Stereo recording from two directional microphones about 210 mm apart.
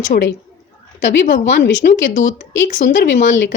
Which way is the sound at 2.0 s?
35° left (ahead or behind).